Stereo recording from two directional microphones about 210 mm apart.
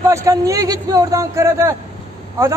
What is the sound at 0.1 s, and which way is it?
A man's voice, 15° right (ahead or behind).